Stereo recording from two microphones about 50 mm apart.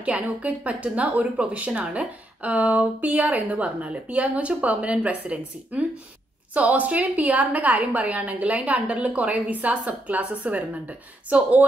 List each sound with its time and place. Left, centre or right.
0.0 s a woman's voice: right
2.0 s a woman's voice: right